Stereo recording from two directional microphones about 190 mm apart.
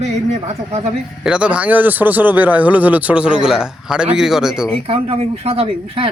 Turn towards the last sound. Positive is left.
turn(degrees=-30)  # may be behind; listen again after turning